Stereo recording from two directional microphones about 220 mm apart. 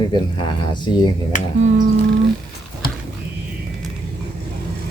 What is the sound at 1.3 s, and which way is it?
Speech, 35° left (ahead or behind).